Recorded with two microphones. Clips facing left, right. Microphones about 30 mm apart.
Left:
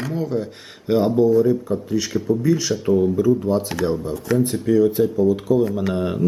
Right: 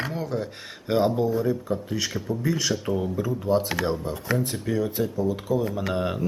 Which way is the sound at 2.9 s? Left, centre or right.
Centre.